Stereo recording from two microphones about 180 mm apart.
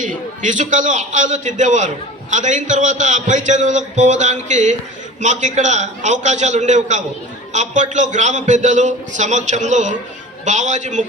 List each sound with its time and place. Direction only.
0.0 s a man's voice: 45° right (ahead or behind)